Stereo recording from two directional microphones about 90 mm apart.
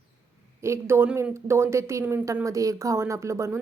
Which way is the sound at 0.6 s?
30° right (ahead or behind).